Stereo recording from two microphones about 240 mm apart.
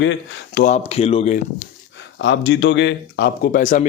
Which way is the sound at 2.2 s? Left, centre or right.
Left.